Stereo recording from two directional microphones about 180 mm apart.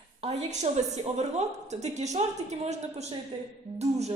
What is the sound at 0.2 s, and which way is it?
A woman's voice, 30° right (ahead or behind).